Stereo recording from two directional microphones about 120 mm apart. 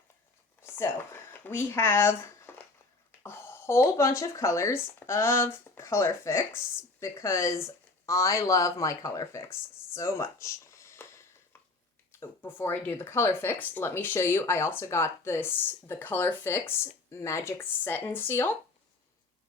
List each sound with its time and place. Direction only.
0.6 s speech: 20° left (ahead or behind)
12.2 s speech: 20° left (ahead or behind)